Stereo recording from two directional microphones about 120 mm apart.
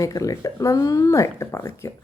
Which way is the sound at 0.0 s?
30° left (ahead or behind).